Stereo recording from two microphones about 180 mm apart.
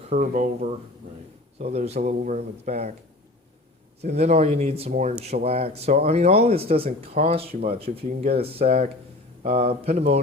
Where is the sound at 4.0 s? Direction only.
35° right (ahead or behind).